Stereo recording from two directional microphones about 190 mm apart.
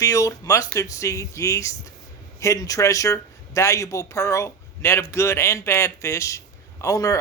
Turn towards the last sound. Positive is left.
turn(degrees=15)  # may be behind; listen again after turning